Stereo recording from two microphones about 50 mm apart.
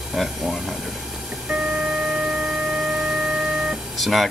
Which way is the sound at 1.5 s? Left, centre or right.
Right.